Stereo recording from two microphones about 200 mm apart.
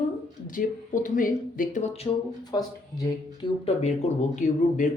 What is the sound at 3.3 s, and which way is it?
Speech, 30° left (ahead or behind).